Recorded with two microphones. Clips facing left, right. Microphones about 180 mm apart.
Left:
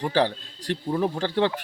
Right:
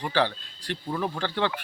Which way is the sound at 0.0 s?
40° left (ahead or behind).